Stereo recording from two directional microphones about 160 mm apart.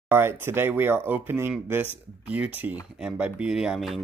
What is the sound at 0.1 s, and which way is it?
Speech, 15° right (ahead or behind).